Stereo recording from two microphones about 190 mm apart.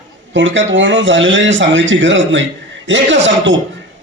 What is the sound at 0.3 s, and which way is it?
A man's voice, 75° right (ahead or behind).